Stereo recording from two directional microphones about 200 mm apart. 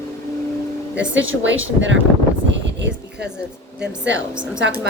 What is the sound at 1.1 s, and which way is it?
Speech, 75° right (ahead or behind).